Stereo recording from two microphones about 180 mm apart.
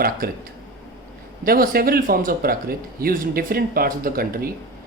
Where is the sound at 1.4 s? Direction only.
55° right (ahead or behind).